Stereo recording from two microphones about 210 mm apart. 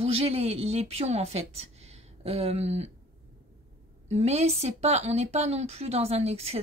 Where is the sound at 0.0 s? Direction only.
30° right (ahead or behind).